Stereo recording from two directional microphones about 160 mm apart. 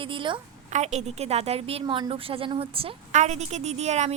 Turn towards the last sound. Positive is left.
turn(degrees=-45)  # may be behind; listen again after turning